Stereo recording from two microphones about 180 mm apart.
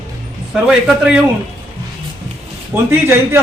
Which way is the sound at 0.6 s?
5° right (ahead or behind).